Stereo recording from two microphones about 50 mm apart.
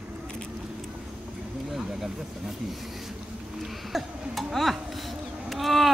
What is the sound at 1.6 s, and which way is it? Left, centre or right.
Speech, centre.